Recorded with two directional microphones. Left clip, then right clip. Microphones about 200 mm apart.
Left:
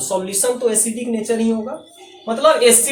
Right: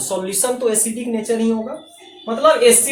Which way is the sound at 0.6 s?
20° right (ahead or behind).